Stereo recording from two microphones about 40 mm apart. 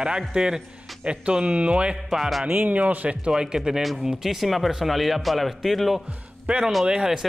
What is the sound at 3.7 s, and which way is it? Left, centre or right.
Speech, centre.